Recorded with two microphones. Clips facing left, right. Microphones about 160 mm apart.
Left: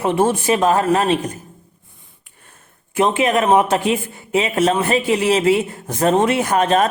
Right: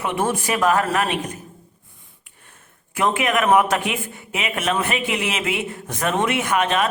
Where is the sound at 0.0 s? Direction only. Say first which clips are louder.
Left 6 dB; 30° left (ahead or behind).